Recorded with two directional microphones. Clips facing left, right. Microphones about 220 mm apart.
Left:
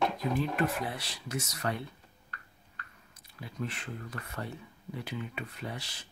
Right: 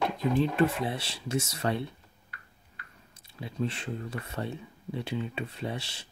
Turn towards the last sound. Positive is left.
turn(degrees=-25)  # may be behind; listen again after turning